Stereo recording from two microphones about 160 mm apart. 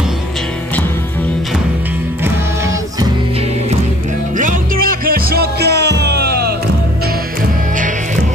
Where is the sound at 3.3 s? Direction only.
40° right (ahead or behind); by 6.5 s 85° right.